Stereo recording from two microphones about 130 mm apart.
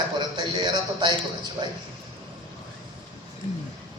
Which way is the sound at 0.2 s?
35° right (ahead or behind).